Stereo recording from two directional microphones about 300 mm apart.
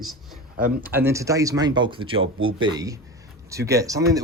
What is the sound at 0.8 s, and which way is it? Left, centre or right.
Speech, centre.